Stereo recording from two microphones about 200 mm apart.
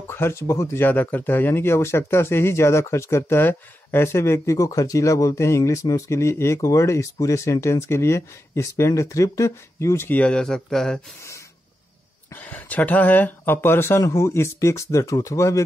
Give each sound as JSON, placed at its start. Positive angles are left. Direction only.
{"t": 0.0, "sound": "speech", "side_deg": 10}
{"t": 12.3, "sound": "speech", "side_deg": 10}